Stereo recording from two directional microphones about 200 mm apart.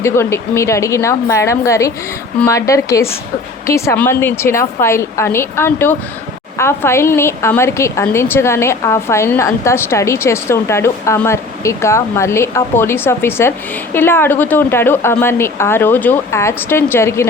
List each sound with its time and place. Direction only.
0.0 s a woman's voice: 15° left (ahead or behind)